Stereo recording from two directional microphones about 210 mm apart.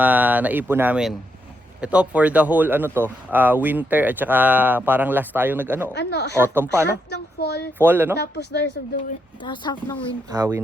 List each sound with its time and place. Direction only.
0.0 s speech: 10° right (ahead or behind)
5.9 s speech: 55° left (ahead or behind)
6.4 s speech: 10° right (ahead or behind)
7.1 s a sound: 50° left (ahead or behind)
7.8 s speech: 10° right (ahead or behind)
8.2 s speech: 55° left (ahead or behind)
9.4 s speech: 20° left (ahead or behind)
10.2 s speech: 15° right (ahead or behind)